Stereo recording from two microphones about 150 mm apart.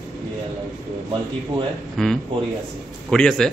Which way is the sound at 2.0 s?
Centre (ahead or behind).